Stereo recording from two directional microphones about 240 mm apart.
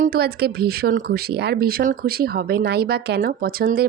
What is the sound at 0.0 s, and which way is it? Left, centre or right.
Speech, right.